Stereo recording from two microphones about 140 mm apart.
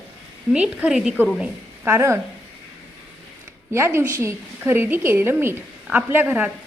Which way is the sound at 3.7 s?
20° right (ahead or behind).